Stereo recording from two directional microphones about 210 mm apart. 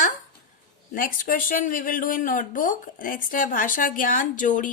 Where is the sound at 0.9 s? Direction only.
40° left (ahead or behind).